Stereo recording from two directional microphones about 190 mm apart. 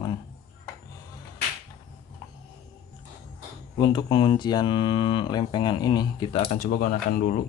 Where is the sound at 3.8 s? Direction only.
25° left (ahead or behind).